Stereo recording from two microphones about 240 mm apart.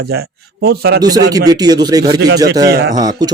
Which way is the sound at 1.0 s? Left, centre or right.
Centre.